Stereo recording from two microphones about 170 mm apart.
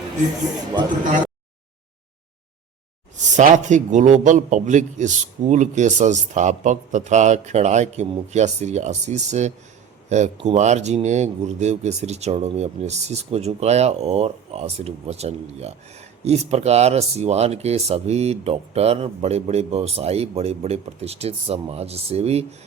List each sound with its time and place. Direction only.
3.2 s a man's voice: 45° right (ahead or behind)